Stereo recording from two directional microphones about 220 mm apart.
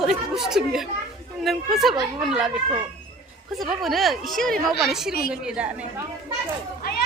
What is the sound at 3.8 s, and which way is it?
A woman's voice, centre (ahead or behind).